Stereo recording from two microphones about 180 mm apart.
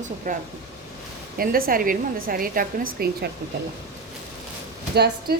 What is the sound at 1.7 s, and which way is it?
A woman's voice, 55° right (ahead or behind).